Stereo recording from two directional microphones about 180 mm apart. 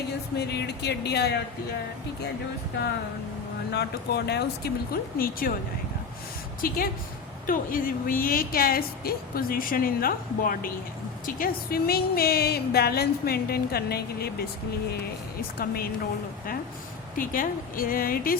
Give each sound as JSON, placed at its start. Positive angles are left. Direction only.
{"t": 0.3, "sound": "speech", "side_deg": 65}
{"t": 3.7, "sound": "speech", "side_deg": 65}
{"t": 6.6, "sound": "a woman's voice", "side_deg": 55}
{"t": 17.2, "sound": "a woman's voice", "side_deg": 50}